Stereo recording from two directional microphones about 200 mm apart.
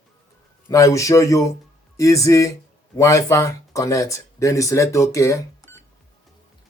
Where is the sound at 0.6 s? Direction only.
15° left (ahead or behind).